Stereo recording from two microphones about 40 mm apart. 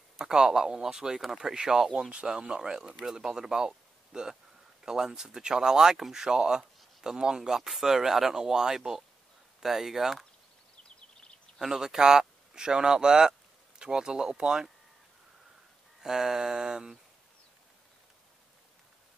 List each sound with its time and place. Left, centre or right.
0.2 s speech: centre
11.6 s speech: centre
16.0 s speech: centre